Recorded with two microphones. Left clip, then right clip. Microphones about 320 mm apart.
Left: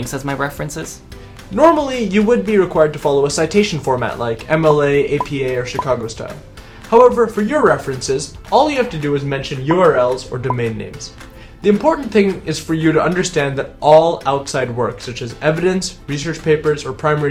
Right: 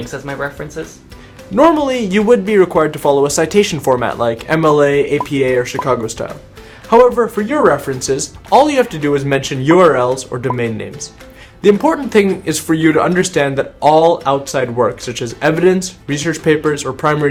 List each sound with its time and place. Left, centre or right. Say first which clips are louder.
0.1 s speech: left 3 dB; left
1.5 s speech: right 1 dB; right